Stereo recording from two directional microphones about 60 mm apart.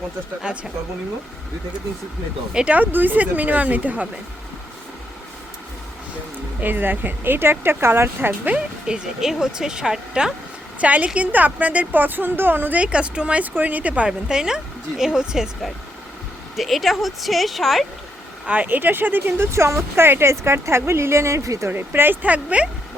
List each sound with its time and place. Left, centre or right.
0.4 s speech: centre
2.5 s speech: centre
2.7 s a woman's voice: right
6.6 s speech: right
8.4 s speech: centre
10.8 s a woman's voice: right
12.8 s a woman's voice: centre
14.1 s speech: centre
16.6 s a woman's voice: centre
18.4 s speech: right
19.5 s speech: right
21.7 s a woman's voice: right